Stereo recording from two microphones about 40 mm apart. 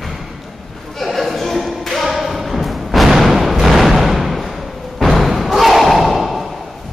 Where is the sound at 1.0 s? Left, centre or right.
Centre.